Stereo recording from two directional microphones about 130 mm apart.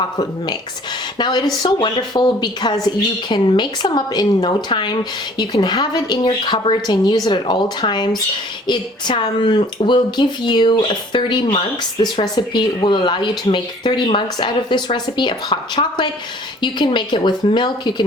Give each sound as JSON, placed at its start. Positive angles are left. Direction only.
{"t": 1.2, "sound": "speech", "side_deg": 35}